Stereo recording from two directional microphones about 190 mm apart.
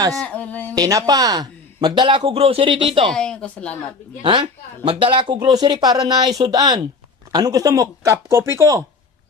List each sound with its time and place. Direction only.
0.1 s speech: 5° left (ahead or behind)
0.8 s speech: 20° right (ahead or behind)
3.1 s speech: 5° left (ahead or behind)
4.2 s speech: 25° right (ahead or behind)